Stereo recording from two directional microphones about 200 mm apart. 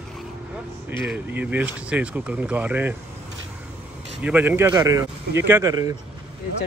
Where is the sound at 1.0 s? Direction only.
10° right (ahead or behind).